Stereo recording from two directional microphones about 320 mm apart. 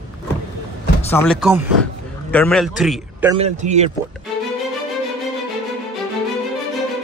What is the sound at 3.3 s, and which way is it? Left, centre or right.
Speech, right.